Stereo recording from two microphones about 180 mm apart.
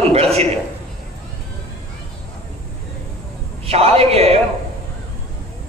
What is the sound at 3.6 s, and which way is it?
Speech, 35° right (ahead or behind).